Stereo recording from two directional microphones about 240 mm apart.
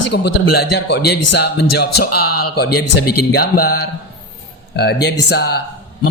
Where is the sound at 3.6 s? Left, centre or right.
Left.